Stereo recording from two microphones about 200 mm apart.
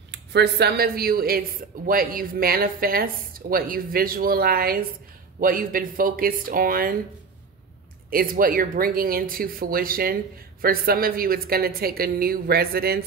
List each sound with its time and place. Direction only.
0.1 s speech: 55° right (ahead or behind)
8.1 s speech: 45° right (ahead or behind)